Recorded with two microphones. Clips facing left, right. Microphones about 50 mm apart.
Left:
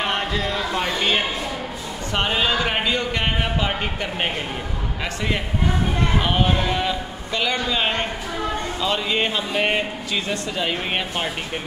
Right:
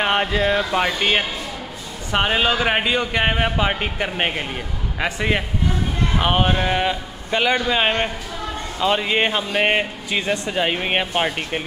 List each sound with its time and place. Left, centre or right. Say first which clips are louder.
0.0 s speech: right 4 dB; right